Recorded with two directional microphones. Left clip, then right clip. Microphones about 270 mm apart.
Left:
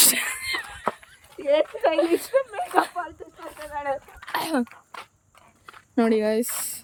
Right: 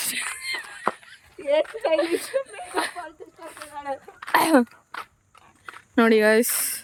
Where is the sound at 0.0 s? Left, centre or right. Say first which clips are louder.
Left 7 dB; centre.